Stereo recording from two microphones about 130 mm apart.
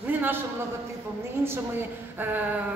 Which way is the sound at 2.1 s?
15° right (ahead or behind).